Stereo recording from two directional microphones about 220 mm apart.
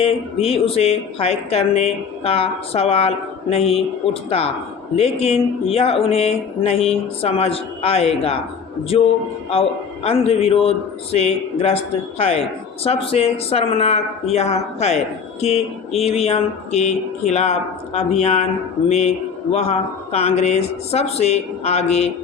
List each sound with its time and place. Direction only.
0.0 s speech: 25° left (ahead or behind)
9.5 s speech: 25° left (ahead or behind)